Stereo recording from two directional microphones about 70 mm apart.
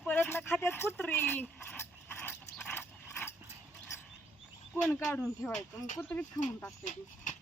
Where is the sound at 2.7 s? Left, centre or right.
Left.